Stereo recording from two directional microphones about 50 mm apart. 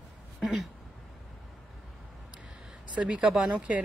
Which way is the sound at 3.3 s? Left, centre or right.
Right.